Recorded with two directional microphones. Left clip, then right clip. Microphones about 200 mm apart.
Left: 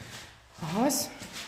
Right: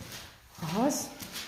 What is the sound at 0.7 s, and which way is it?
Speech, 25° left (ahead or behind).